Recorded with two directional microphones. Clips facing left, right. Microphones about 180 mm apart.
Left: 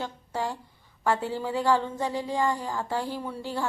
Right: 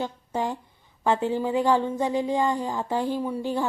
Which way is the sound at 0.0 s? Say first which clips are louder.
Right 3 dB; 20° right (ahead or behind).